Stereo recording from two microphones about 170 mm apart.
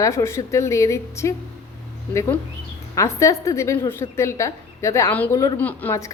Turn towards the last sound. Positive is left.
turn(degrees=15)  # may be behind; listen again after turning